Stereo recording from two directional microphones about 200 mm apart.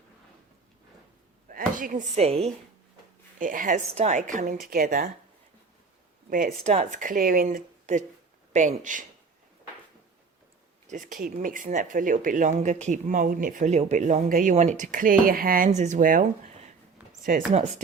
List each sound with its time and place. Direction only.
1.5 s speech: 45° right (ahead or behind)
3.3 s speech: 40° right (ahead or behind)
6.3 s speech: 40° right (ahead or behind)
10.8 s speech: 40° right (ahead or behind)